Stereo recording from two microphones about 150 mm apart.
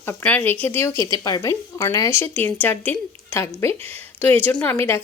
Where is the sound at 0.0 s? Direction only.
10° left (ahead or behind).